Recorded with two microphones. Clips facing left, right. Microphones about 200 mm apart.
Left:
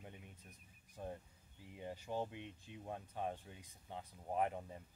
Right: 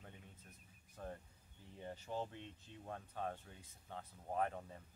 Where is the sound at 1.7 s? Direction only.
15° left (ahead or behind).